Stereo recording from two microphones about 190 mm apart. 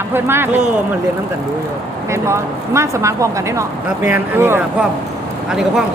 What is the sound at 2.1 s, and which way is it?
Speech, 15° right (ahead or behind).